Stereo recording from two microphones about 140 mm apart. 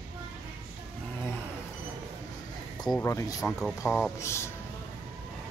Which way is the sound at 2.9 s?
20° left (ahead or behind).